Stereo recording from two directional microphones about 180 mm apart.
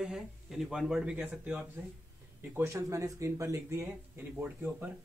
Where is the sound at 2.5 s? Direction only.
15° right (ahead or behind).